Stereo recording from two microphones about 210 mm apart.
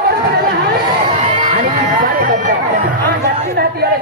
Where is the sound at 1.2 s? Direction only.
30° right (ahead or behind).